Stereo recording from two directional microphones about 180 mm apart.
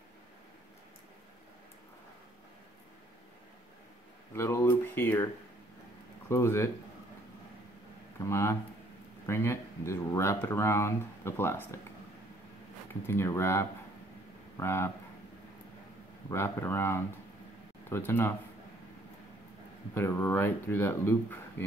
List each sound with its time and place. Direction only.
4.3 s a sound: 15° left (ahead or behind)
6.2 s speech: 15° left (ahead or behind)
8.2 s speech: 15° left (ahead or behind)
13.0 s speech: 15° left (ahead or behind)
16.3 s speech: 15° left (ahead or behind)
19.9 s speech: 15° left (ahead or behind)